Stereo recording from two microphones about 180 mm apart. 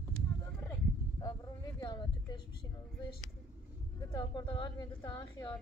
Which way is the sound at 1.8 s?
20° left (ahead or behind).